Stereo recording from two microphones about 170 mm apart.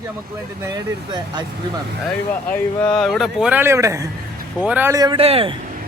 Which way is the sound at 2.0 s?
10° left (ahead or behind).